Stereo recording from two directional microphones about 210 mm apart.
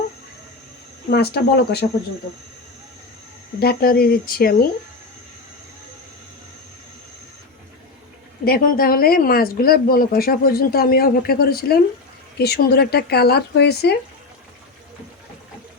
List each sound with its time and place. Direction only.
1.1 s speech: 50° left (ahead or behind)
3.6 s speech: 45° left (ahead or behind)
8.4 s speech: 45° left (ahead or behind)